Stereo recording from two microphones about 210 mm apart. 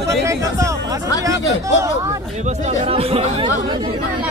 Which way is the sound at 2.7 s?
30° right (ahead or behind).